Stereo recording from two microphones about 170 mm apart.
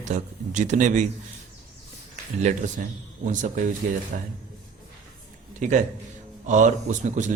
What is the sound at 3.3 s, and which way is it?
Speech, 50° right (ahead or behind).